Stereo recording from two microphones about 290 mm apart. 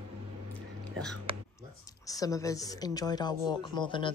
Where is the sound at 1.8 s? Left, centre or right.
Centre.